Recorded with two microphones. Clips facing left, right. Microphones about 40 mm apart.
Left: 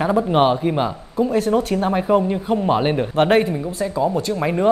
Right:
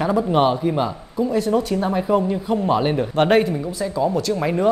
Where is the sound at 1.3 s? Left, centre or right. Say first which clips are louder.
Even; left.